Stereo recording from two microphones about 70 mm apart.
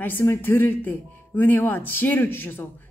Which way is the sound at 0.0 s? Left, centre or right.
Left.